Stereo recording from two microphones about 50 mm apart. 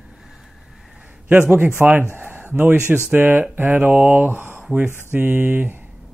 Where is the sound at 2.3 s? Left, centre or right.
Right.